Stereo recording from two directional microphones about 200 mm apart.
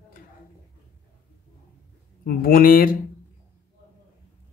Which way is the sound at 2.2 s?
45° left (ahead or behind).